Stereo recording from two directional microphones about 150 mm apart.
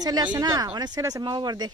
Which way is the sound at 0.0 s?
25° right (ahead or behind).